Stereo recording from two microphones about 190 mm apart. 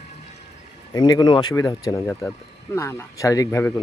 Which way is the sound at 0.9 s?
20° left (ahead or behind).